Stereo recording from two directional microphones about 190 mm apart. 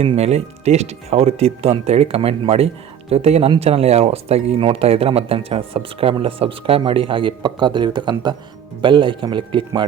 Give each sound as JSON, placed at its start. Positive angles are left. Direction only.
{"t": 0.0, "sound": "a man's voice", "side_deg": -30}